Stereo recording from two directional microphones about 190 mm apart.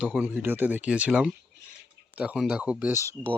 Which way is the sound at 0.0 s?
5° right (ahead or behind).